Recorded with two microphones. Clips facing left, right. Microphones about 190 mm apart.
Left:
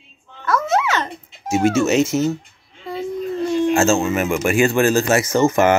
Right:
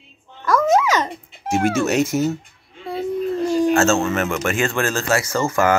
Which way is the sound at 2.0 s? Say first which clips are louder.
Left 2 dB; 10° right (ahead or behind).